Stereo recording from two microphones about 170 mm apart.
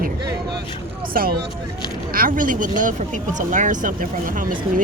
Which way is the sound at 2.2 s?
55° right (ahead or behind).